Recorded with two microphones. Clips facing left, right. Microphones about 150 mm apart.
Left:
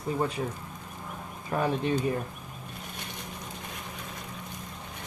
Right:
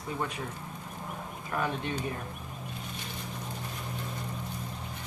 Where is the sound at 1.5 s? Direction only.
35° left (ahead or behind).